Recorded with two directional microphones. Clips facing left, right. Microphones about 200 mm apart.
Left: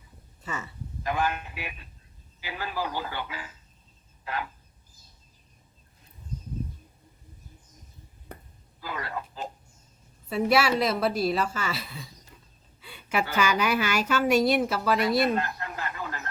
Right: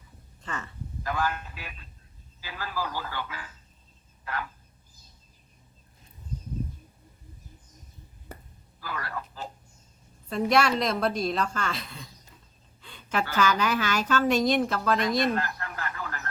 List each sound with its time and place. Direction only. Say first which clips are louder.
0.4 s speech: left 1 dB; 10° left (ahead or behind)
8.8 s speech: left 1 dB; 20° left (ahead or behind)
10.2 s a woman's voice: even; 5° left (ahead or behind)
15.4 s radio: left 1 dB; 20° left (ahead or behind)